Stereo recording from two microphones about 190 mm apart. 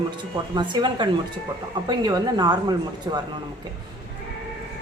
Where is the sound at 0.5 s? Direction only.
25° right (ahead or behind).